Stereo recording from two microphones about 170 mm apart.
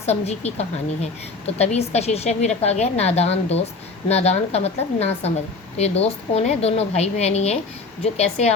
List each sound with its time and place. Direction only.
0.0 s a woman's voice: 40° left (ahead or behind)